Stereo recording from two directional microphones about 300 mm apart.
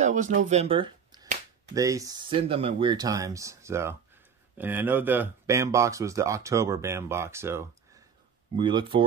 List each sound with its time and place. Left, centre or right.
0.0 s speech: right